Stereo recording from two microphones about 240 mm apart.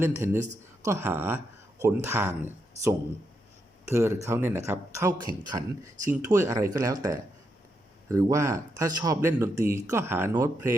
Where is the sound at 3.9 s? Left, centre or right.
Centre.